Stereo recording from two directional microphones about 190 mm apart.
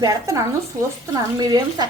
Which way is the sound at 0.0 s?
20° right (ahead or behind).